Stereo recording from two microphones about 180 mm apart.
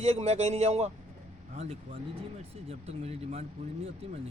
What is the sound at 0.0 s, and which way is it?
Speech, 35° right (ahead or behind).